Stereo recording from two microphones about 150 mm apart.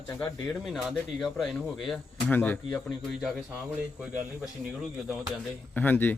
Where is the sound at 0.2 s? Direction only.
5° left (ahead or behind).